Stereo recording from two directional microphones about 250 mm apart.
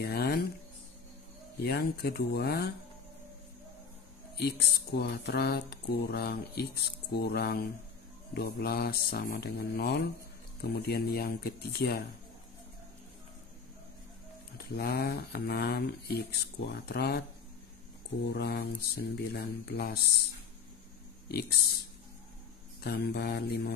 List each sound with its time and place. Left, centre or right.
0.0 s a sound: left
1.6 s speech: left
4.4 s speech: left
14.7 s speech: left
18.3 s speech: left
22.8 s speech: left